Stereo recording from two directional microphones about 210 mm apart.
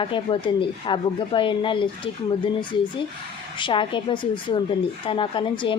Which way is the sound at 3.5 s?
20° left (ahead or behind).